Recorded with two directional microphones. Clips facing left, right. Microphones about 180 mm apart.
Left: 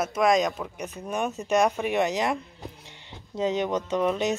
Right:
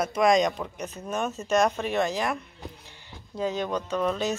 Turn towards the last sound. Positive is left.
turn(degrees=15)  # may be behind; listen again after turning